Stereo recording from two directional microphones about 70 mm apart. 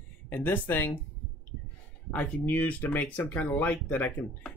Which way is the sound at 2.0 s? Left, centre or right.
Left.